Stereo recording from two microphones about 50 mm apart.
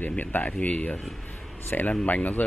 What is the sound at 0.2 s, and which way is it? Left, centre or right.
Speech, left.